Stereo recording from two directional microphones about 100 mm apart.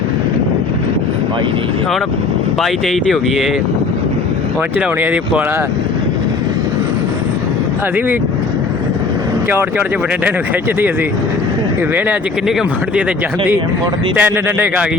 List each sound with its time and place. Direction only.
2.6 s speech: centre (ahead or behind)
4.9 s speech: 15° right (ahead or behind)
9.5 s speech: 20° right (ahead or behind)
14.2 s speech: 20° right (ahead or behind)